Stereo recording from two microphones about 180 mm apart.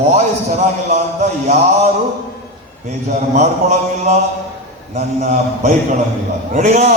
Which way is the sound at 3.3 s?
40° right (ahead or behind).